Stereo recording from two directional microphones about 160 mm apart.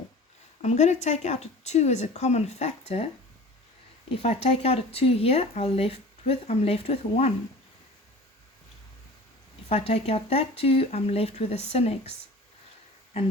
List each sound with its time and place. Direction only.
0.6 s speech: 45° left (ahead or behind)
4.2 s speech: 40° left (ahead or behind)
9.6 s speech: 40° left (ahead or behind)